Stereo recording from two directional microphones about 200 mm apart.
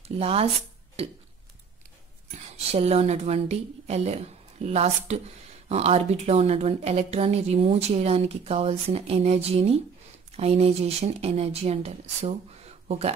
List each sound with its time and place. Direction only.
0.2 s speech: 30° right (ahead or behind)
2.5 s a woman's voice: 30° right (ahead or behind)